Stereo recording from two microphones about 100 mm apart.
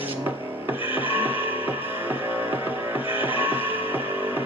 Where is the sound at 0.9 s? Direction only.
20° right (ahead or behind).